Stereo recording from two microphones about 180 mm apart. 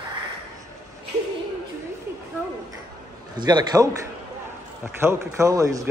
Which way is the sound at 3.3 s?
25° right (ahead or behind).